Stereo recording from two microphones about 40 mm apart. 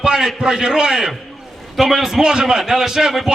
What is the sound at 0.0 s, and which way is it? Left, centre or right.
A man's voice, centre.